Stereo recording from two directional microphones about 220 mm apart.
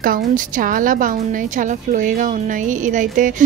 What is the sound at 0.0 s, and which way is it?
Speech, 40° right (ahead or behind).